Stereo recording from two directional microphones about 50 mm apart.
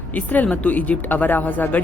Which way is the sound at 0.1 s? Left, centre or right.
Left.